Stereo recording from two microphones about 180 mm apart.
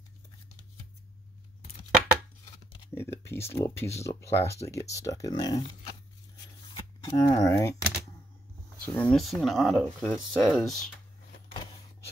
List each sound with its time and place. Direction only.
2.9 s speech: 15° left (ahead or behind)
6.7 s a sound: 20° left (ahead or behind)
8.8 s speech: 5° left (ahead or behind)